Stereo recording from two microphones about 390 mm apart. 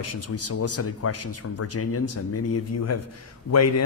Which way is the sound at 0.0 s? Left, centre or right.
Left.